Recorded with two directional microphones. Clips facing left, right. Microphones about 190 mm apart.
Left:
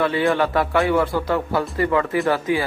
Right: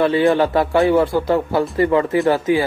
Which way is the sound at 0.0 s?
25° right (ahead or behind).